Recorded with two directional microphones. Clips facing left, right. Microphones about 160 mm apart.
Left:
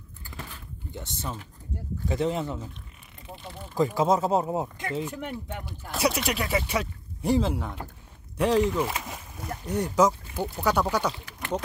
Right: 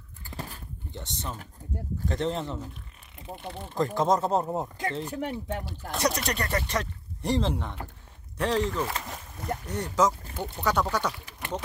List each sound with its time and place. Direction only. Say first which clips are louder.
0.9 s speech: left 2 dB; 5° left (ahead or behind)
3.7 s speech: left 2 dB; 5° left (ahead or behind)
5.0 s speech: right 2 dB; 35° right (ahead or behind)
5.9 s speech: left 2 dB; 5° left (ahead or behind)
9.0 s splash: left 1 dB; 5° left (ahead or behind)
9.7 s speech: left 3 dB; 10° left (ahead or behind)